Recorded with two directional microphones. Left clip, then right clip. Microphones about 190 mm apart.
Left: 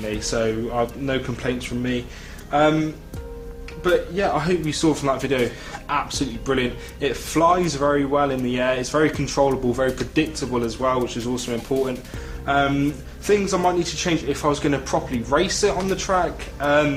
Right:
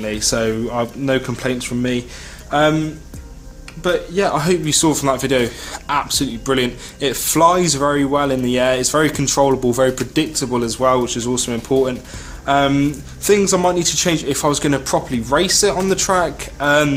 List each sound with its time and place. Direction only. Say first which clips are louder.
0.0 s speech: right 4 dB; 40° right (ahead or behind)
3.8 s speech: right 3 dB; 50° right (ahead or behind)